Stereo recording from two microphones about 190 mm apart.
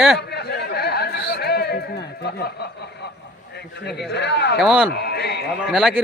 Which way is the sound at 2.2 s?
60° left (ahead or behind).